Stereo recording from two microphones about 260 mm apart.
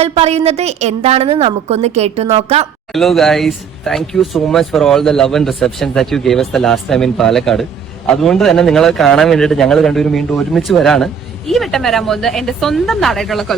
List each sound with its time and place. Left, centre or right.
0.0 s a woman's voice: right
2.9 s speech: centre